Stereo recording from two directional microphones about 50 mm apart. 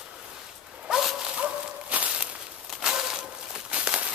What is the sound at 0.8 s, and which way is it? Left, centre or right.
Dog, centre.